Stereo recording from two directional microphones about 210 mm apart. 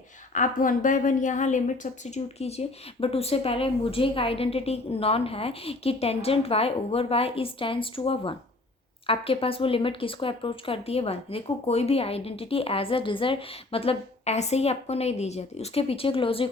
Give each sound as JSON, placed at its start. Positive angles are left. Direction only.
{"t": 0.3, "sound": "a woman's voice", "side_deg": 40}